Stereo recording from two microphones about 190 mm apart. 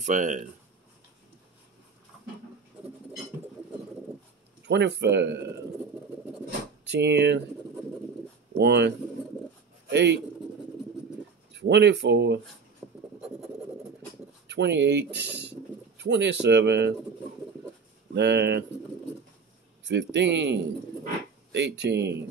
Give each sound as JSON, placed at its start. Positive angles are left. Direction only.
{"t": 0.0, "sound": "speech", "side_deg": -40}
{"t": 4.6, "sound": "speech", "side_deg": -65}
{"t": 6.9, "sound": "speech", "side_deg": -65}
{"t": 8.5, "sound": "speech", "side_deg": -65}
{"t": 11.5, "sound": "speech", "side_deg": -65}
{"t": 12.8, "sound": "writing", "side_deg": -5}
{"t": 14.5, "sound": "speech", "side_deg": -65}
{"t": 15.1, "sound": "speech", "side_deg": -10}
{"t": 16.0, "sound": "speech", "side_deg": -65}
{"t": 18.1, "sound": "speech", "side_deg": -65}
{"t": 19.9, "sound": "a man's voice", "side_deg": -70}